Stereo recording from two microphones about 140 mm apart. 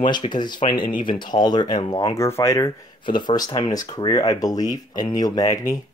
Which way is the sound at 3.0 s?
35° left (ahead or behind).